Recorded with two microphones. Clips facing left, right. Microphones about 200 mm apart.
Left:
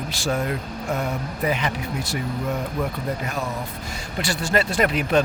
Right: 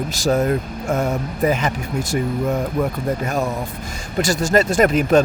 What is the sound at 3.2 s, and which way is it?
Speech, 45° right (ahead or behind).